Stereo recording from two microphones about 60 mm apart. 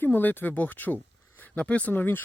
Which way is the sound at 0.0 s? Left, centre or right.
Left.